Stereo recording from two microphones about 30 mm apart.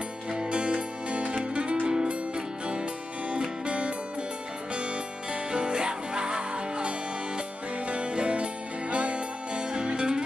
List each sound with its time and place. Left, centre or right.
0.5 s music: right
1.9 s music: right